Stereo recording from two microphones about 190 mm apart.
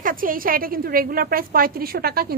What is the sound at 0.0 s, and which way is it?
A woman's voice, 45° right (ahead or behind).